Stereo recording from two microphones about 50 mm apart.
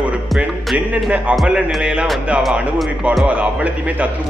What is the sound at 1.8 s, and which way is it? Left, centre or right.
Speech, centre.